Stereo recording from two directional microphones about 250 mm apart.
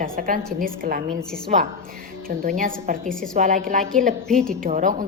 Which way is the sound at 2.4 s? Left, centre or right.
Right.